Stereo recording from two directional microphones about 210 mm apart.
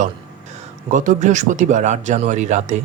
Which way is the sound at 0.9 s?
35° right (ahead or behind).